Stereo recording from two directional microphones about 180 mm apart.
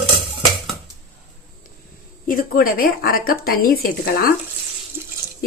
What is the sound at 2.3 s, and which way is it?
Speech, 55° left (ahead or behind).